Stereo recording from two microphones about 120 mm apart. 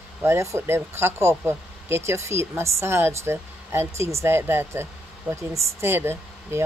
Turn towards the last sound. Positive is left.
turn(degrees=-20)  # may be behind; listen again after turning